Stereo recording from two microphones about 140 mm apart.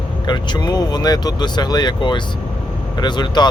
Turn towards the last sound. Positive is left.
turn(degrees=30)  # may be behind; listen again after turning